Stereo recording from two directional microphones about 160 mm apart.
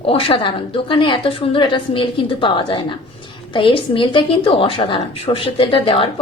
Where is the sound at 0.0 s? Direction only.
35° left (ahead or behind).